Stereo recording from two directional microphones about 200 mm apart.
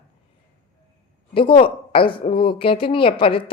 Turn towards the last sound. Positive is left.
turn(degrees=25)  # may be behind; listen again after turning